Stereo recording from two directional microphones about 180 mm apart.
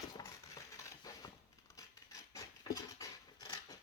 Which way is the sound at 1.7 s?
15° left (ahead or behind).